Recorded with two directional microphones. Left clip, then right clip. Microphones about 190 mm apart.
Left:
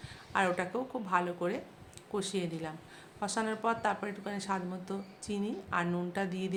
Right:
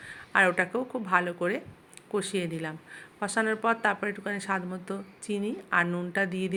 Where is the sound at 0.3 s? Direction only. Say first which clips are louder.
Right 7 dB; 25° right (ahead or behind).